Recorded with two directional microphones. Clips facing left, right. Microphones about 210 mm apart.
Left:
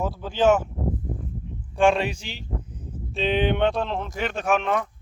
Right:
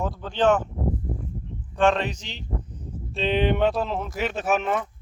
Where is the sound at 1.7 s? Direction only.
10° left (ahead or behind).